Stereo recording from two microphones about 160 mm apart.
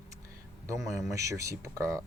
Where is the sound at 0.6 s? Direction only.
20° right (ahead or behind).